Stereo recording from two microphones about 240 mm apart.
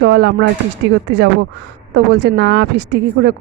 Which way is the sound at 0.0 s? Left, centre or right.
Right.